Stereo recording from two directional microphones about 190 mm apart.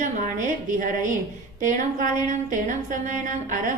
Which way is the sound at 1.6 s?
40° right (ahead or behind).